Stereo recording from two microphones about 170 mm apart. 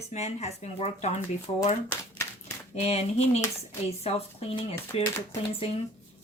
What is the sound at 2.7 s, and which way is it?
A woman's voice, 40° left (ahead or behind).